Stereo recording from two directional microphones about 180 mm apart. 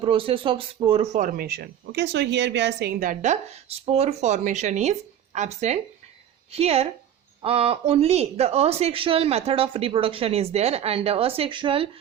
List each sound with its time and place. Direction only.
0.0 s speech: 30° right (ahead or behind)
1.2 s a woman's voice: 55° right (ahead or behind); by 11.9 s 30° right (ahead or behind)